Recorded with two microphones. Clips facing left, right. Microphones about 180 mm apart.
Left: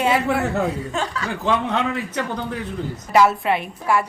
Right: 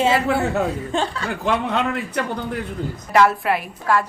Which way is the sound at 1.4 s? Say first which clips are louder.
Even; 15° right (ahead or behind).